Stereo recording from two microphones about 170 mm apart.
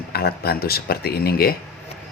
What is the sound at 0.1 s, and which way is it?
Speech, 65° left (ahead or behind).